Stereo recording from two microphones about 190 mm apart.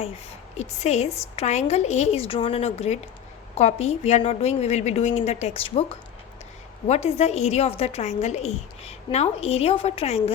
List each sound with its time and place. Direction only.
0.5 s a woman's voice: 35° left (ahead or behind)